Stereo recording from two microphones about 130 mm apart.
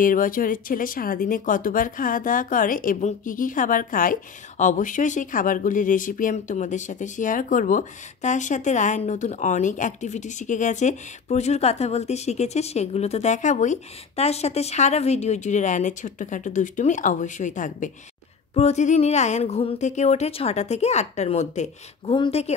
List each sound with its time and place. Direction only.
0.0 s speech: 90° left
18.5 s speech: 55° left (ahead or behind)
19.8 s speech: 65° left (ahead or behind)